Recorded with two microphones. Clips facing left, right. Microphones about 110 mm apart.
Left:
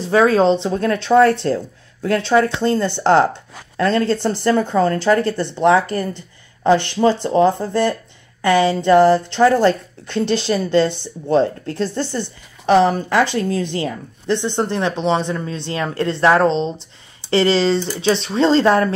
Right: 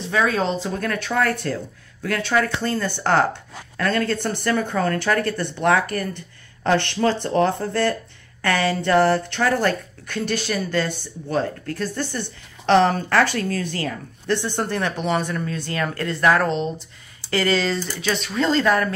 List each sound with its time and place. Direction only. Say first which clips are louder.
0.0 s a woman's voice: left 8 dB; 35° left (ahead or behind)